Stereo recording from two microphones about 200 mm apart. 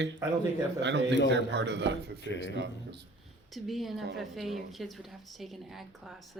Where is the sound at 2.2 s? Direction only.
60° left (ahead or behind).